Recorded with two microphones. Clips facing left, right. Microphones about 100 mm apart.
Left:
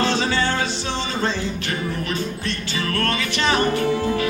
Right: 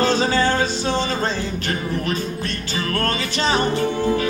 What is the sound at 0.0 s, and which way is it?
Music, 35° right (ahead or behind).